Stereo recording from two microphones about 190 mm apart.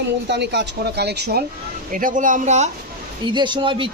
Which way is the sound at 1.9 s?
45° right (ahead or behind).